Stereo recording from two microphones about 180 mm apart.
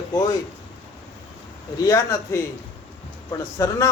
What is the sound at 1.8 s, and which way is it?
Speech, 15° left (ahead or behind).